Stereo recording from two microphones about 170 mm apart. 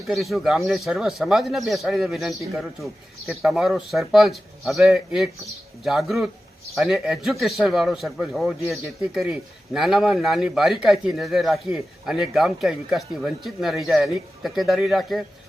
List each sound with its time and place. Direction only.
0.1 s speech: centre (ahead or behind)